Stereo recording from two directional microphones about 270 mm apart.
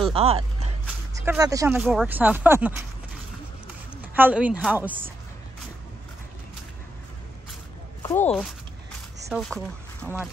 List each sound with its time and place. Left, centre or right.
0.1 s speech: right
1.1 s speech: centre
4.1 s a woman's voice: centre
8.0 s a woman's voice: centre